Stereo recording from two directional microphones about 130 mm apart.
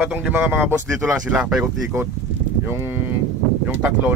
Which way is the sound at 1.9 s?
20° right (ahead or behind).